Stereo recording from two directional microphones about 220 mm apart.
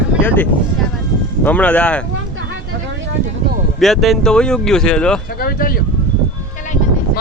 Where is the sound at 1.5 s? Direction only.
5° left (ahead or behind).